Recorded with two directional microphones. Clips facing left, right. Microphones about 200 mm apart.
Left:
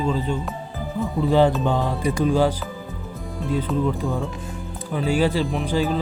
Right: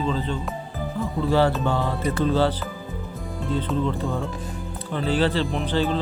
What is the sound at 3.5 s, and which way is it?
Speech, 10° left (ahead or behind).